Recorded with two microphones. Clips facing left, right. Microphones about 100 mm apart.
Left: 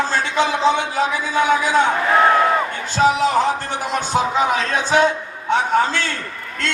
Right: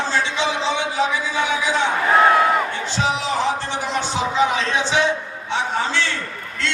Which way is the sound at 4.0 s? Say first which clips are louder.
Left 1 dB; 45° left (ahead or behind).